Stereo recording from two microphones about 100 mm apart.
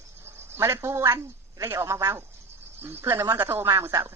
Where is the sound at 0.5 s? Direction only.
25° right (ahead or behind).